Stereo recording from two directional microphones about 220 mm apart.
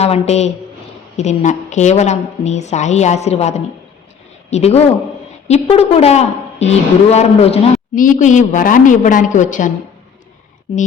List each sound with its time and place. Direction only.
0.0 s a woman's voice: 30° left (ahead or behind)